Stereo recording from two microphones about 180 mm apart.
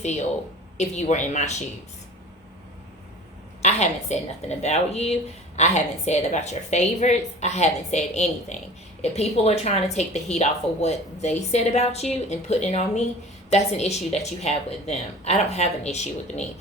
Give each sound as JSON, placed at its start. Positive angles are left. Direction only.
{"t": 0.8, "sound": "a woman's voice", "side_deg": 40}
{"t": 3.6, "sound": "a woman's voice", "side_deg": 40}